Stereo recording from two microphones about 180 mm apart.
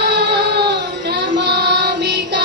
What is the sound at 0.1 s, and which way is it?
Music, 65° right (ahead or behind).